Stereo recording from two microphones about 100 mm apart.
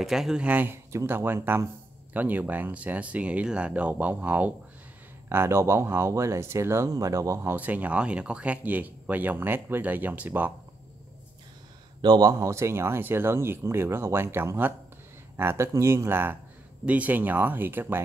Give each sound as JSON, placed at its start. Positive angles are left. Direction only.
{"t": 0.0, "sound": "speech", "side_deg": -5}
{"t": 7.5, "sound": "speech", "side_deg": -15}
{"t": 12.0, "sound": "speech", "side_deg": -45}